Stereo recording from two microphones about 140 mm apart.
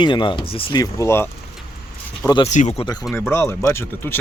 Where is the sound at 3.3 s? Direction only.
15° left (ahead or behind).